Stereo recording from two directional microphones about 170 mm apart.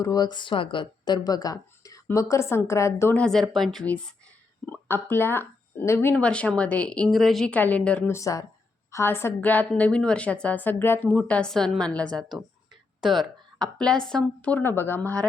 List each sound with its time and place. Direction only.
0.0 s a woman's voice: 25° left (ahead or behind); by 12.2 s 5° left (ahead or behind)
13.1 s speech: 25° right (ahead or behind)
13.7 s a woman's voice: 5° left (ahead or behind)